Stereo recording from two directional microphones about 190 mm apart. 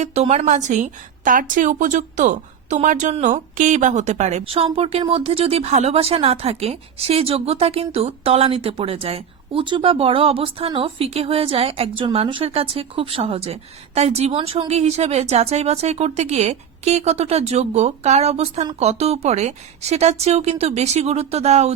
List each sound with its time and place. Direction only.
0.0 s a woman's voice: 35° right (ahead or behind)